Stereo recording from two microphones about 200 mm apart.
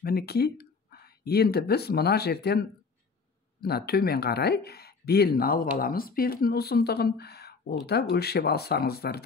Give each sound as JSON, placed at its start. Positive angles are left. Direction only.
{"t": 0.0, "sound": "speech", "side_deg": 50}
{"t": 3.6, "sound": "speech", "side_deg": 50}